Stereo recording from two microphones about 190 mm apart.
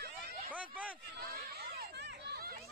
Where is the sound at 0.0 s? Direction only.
55° right (ahead or behind).